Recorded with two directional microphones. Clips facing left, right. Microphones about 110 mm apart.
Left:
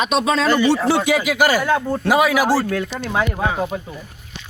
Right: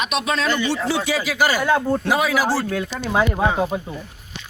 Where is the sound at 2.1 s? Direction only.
10° left (ahead or behind).